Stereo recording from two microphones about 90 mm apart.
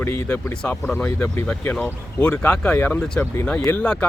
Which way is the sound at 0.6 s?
15° left (ahead or behind).